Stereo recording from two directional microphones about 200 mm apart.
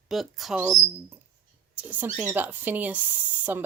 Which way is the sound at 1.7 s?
10° right (ahead or behind).